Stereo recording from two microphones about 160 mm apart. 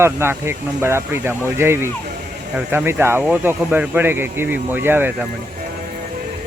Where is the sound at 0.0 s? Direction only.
15° right (ahead or behind).